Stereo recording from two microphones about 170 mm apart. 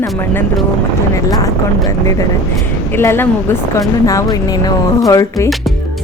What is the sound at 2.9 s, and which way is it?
Speech, 15° left (ahead or behind).